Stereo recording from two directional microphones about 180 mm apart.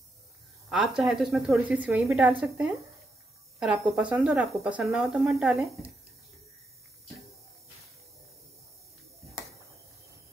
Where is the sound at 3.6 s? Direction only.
5° right (ahead or behind).